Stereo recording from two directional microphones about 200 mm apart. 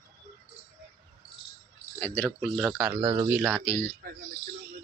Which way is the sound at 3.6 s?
10° left (ahead or behind).